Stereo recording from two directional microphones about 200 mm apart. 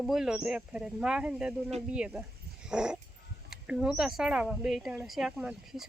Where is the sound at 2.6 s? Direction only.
5° right (ahead or behind).